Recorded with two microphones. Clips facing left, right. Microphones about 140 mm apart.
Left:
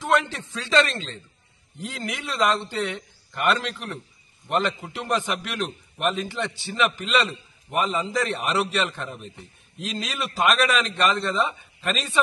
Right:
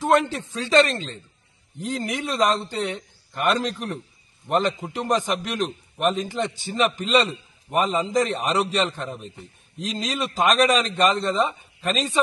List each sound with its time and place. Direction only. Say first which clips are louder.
0.0 s a man's voice: right 3 dB; 45° right (ahead or behind)